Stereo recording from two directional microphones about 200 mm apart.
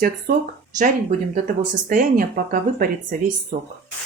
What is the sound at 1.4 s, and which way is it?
Speech, 40° right (ahead or behind).